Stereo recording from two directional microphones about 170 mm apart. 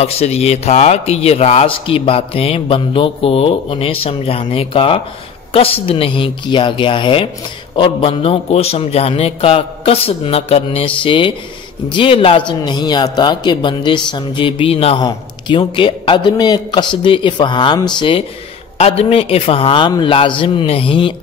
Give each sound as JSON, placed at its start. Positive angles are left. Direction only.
{"t": 0.0, "sound": "a man's voice", "side_deg": 35}